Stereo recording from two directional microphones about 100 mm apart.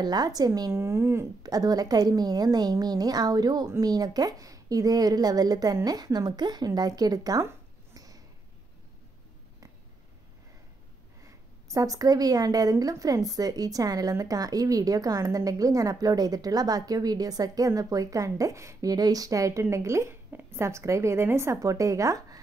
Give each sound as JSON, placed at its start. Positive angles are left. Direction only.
{"t": 0.0, "sound": "a woman's voice", "side_deg": -40}
{"t": 1.4, "sound": "a woman's voice", "side_deg": -40}
{"t": 7.4, "sound": "a sound", "side_deg": -35}
{"t": 11.2, "sound": "a woman's voice", "side_deg": -35}